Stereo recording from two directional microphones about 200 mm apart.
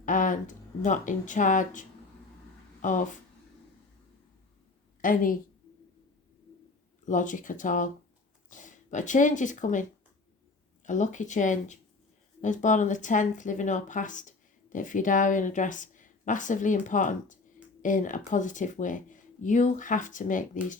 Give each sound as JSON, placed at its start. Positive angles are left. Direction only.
{"t": 0.0, "sound": "speech", "side_deg": 40}
{"t": 5.0, "sound": "a woman's voice", "side_deg": 45}
{"t": 7.0, "sound": "speech", "side_deg": 40}
{"t": 10.8, "sound": "speech", "side_deg": 40}